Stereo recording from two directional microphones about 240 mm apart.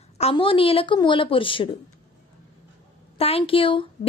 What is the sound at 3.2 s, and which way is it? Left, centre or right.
Speech, left.